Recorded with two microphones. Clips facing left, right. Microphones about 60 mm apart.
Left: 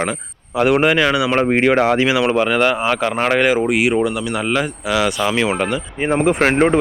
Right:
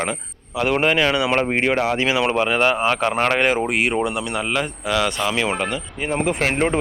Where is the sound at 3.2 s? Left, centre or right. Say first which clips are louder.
Left 5 dB; centre.